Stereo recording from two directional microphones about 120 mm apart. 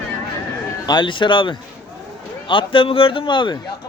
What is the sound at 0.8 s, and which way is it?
A man's voice, 40° left (ahead or behind).